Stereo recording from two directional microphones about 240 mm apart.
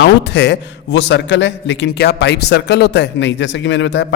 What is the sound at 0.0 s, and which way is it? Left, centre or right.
A man's voice, left.